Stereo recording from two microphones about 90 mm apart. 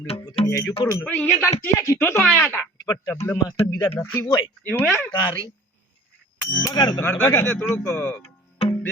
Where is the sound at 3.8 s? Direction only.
25° left (ahead or behind).